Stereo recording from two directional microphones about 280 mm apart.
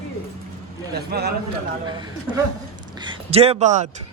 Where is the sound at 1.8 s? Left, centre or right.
Centre.